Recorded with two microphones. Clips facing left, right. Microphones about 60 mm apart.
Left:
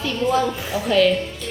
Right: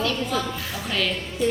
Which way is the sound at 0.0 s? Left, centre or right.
Centre.